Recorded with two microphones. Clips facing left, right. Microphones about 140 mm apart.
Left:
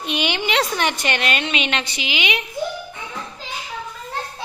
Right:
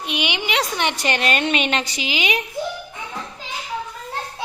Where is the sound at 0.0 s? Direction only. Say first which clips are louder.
Left 2 dB; 10° right (ahead or behind).